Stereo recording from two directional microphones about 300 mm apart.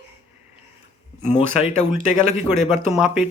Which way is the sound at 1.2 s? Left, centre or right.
Left.